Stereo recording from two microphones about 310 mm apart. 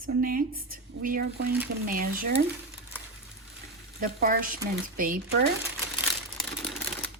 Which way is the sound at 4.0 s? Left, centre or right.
Right.